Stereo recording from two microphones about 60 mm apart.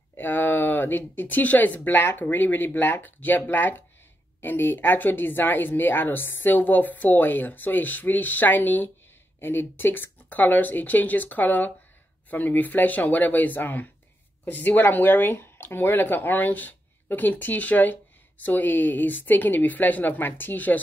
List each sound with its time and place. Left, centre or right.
0.1 s a woman's voice: left